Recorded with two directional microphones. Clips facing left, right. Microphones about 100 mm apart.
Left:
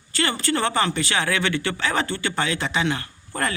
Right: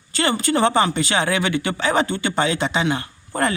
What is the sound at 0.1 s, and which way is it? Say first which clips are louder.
Speech: right 4 dB; 20° right (ahead or behind).